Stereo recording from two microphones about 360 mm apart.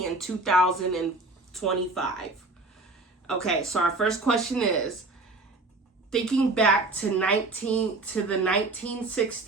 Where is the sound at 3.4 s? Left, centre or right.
Centre.